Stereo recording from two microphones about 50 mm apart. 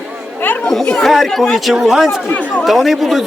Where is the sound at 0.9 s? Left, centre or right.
Centre.